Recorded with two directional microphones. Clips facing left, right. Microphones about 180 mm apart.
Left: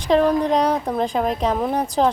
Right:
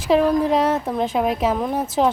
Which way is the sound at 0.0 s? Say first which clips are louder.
Even; 5° right (ahead or behind).